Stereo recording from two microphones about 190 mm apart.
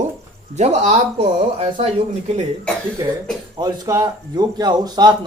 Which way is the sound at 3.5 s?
20° right (ahead or behind).